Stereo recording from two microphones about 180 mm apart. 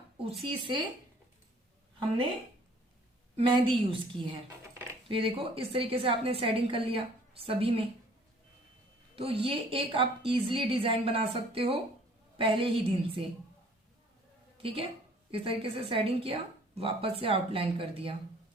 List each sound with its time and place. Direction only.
0.4 s a woman's voice: 30° right (ahead or behind)
3.3 s a woman's voice: 30° right (ahead or behind)
9.1 s a woman's voice: 30° right (ahead or behind)
15.3 s a woman's voice: 30° right (ahead or behind)